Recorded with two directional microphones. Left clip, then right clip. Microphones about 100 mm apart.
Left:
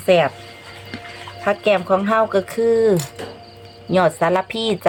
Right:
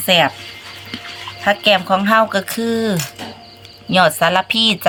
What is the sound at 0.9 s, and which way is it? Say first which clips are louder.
Music: right 4 dB; 40° left (ahead or behind).